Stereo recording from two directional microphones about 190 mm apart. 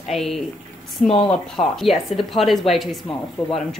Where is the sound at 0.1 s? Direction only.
Centre (ahead or behind).